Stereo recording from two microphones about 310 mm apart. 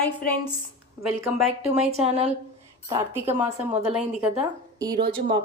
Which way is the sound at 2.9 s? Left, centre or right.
Centre.